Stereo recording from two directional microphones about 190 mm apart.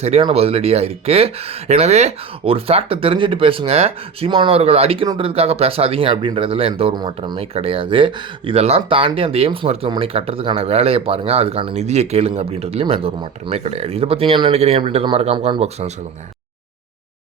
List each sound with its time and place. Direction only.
0.0 s speech: 30° right (ahead or behind)